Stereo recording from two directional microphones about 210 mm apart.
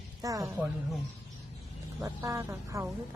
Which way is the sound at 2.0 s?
15° right (ahead or behind).